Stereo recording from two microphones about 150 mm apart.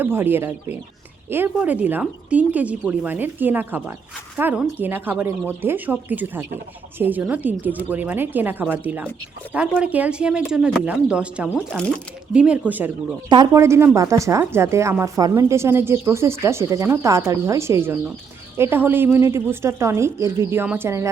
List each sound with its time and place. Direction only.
0.0 s speech: 15° right (ahead or behind)
13.3 s speech: 25° right (ahead or behind)